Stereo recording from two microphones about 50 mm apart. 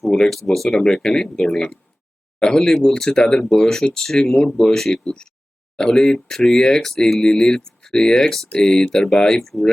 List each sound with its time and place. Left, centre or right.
0.4 s speech: centre